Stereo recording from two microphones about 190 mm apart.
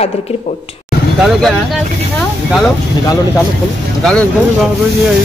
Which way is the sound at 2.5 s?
Centre (ahead or behind).